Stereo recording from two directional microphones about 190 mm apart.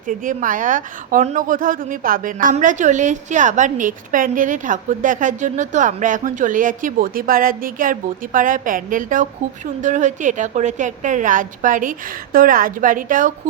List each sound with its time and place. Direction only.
0.1 s a woman's voice: 45° right (ahead or behind)